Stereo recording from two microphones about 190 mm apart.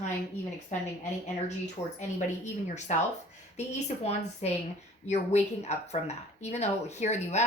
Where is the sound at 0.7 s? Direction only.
40° left (ahead or behind).